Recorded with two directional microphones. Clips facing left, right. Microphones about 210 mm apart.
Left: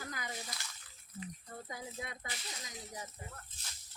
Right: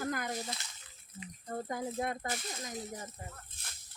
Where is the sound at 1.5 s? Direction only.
55° right (ahead or behind).